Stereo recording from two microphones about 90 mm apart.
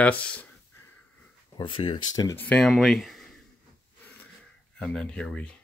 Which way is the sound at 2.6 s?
Centre (ahead or behind).